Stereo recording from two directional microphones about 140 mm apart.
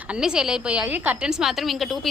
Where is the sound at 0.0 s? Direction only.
5° right (ahead or behind).